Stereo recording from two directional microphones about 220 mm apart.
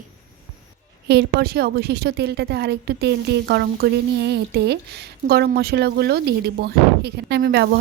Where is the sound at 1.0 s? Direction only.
50° right (ahead or behind).